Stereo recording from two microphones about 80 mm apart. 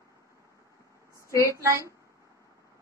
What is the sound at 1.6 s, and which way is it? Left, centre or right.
Speech, right.